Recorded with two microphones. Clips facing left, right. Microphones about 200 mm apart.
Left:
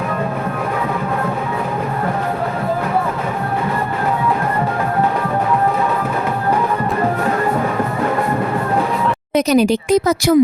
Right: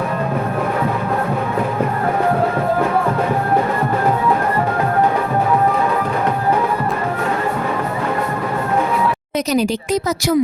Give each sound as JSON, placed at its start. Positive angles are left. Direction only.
{"t": 9.3, "sound": "speech", "side_deg": 55}